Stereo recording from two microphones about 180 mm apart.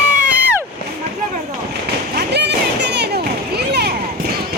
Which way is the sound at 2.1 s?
70° right (ahead or behind).